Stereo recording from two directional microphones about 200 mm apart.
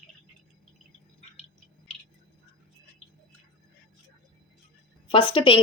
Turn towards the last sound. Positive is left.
turn(degrees=25)  # may be behind; listen again after turning